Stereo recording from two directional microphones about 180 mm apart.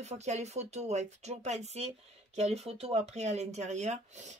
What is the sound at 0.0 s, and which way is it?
Speech, 40° right (ahead or behind).